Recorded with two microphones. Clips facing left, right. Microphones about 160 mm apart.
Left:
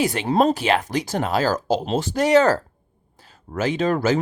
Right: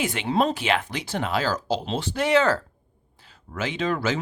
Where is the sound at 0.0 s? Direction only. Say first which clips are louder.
Left 5 dB; 40° left (ahead or behind).